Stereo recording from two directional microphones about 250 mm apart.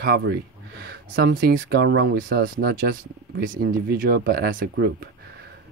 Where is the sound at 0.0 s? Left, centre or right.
Right.